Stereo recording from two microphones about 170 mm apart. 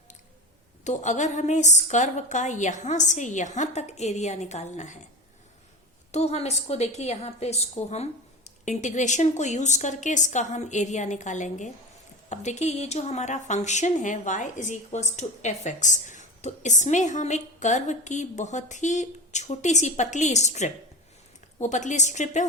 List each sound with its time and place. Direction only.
0.9 s speech: 45° left (ahead or behind)
6.1 s a woman's voice: 40° left (ahead or behind)